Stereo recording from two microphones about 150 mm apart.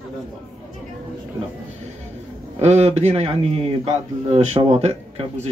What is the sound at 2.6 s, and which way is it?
A man's voice, 45° right (ahead or behind).